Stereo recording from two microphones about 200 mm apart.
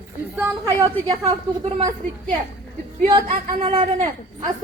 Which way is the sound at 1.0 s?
30° right (ahead or behind).